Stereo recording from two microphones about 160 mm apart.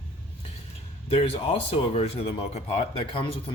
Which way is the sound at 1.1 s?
35° left (ahead or behind).